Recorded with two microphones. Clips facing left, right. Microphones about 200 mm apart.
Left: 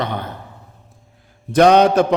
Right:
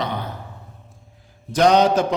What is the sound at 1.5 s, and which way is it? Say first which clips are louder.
Mantra: left 4 dB; 60° left (ahead or behind).